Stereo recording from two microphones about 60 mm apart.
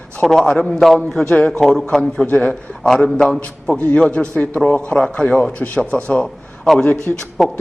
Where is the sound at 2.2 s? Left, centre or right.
Left; by 7.5 s centre.